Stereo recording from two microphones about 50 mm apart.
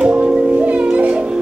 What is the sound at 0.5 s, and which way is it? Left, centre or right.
Music, right.